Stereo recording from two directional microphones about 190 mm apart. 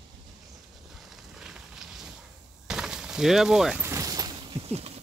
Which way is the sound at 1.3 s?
Centre (ahead or behind).